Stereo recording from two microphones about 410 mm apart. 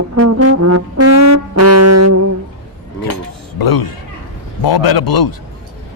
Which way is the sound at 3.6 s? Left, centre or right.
Left.